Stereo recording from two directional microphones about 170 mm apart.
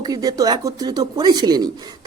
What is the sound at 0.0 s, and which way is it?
Speech, 20° right (ahead or behind).